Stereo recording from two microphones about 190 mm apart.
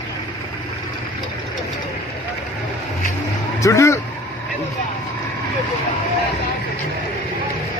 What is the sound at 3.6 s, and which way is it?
Vehicle, 15° left (ahead or behind).